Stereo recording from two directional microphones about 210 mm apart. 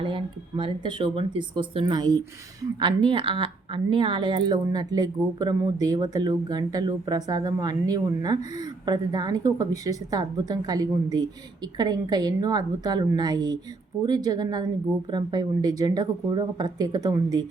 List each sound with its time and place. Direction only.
0.0 s speech: 25° right (ahead or behind)